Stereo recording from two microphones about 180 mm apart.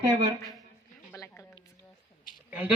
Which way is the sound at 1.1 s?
15° left (ahead or behind).